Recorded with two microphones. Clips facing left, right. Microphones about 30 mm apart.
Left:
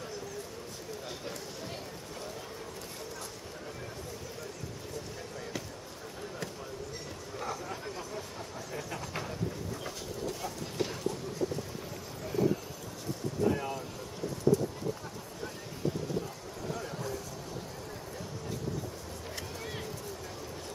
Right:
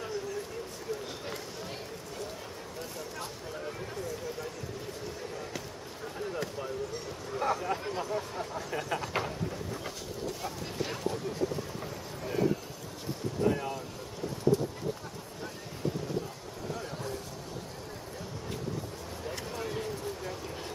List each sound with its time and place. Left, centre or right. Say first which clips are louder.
7.4 s speech: right 8 dB; right
8.7 s speech: right 6 dB; right
9.8 s a sound: even; centre
13.5 s vehicle: right 2 dB; centre
16.6 s vehicle: even; centre